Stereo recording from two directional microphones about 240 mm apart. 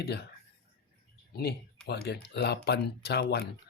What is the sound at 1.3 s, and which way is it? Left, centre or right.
Speech, left.